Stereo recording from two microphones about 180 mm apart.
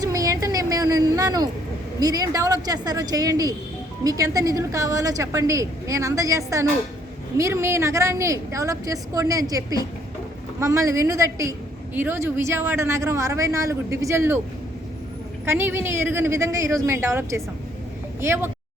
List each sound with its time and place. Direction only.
0.0 s a sound: 20° right (ahead or behind)
2.0 s a woman's voice: 20° right (ahead or behind)
15.4 s a woman's voice: 15° right (ahead or behind)